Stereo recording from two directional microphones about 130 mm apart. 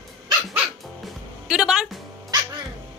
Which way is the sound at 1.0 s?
5° right (ahead or behind).